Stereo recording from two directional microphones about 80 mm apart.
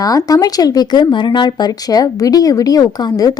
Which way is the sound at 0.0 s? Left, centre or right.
Left.